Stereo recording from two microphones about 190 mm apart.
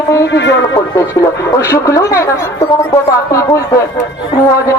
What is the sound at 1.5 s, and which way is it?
A man's voice, 15° left (ahead or behind).